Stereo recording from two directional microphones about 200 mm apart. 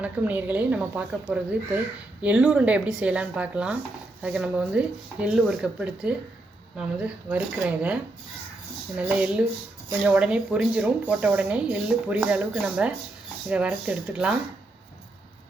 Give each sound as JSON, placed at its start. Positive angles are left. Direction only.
{"t": 0.0, "sound": "speech", "side_deg": -10}
{"t": 9.0, "sound": "speech", "side_deg": -5}